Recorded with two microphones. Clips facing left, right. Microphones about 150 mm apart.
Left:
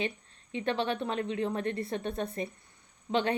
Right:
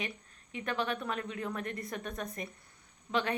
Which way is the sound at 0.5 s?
25° left (ahead or behind).